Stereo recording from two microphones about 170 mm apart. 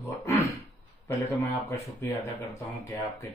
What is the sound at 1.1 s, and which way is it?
Speech, 15° left (ahead or behind).